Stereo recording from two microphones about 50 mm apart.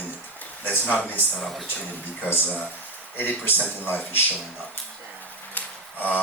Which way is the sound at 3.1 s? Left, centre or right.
Left.